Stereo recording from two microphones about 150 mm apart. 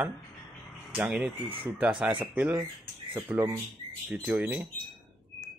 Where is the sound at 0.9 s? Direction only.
5° right (ahead or behind).